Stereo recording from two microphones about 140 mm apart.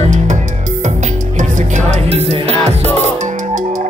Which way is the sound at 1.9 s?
50° right (ahead or behind).